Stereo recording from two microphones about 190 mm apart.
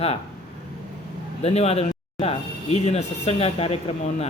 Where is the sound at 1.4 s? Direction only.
30° left (ahead or behind).